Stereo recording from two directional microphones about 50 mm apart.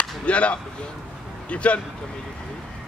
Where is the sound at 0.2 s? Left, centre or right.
Left.